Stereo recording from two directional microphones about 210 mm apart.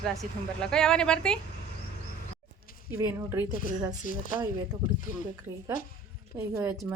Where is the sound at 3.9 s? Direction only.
40° left (ahead or behind).